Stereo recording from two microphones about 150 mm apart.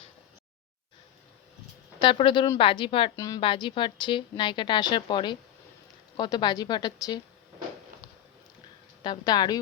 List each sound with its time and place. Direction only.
2.0 s speech: 35° left (ahead or behind)
3.2 s a woman's voice: 25° left (ahead or behind)
3.4 s a woman's voice: 35° left (ahead or behind)
9.0 s a woman's voice: 30° left (ahead or behind)